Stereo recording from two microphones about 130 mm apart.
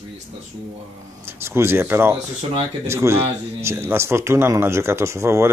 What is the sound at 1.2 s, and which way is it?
A man's voice, 20° right (ahead or behind).